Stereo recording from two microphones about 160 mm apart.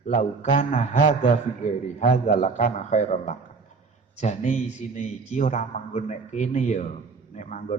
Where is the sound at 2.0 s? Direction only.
50° left (ahead or behind).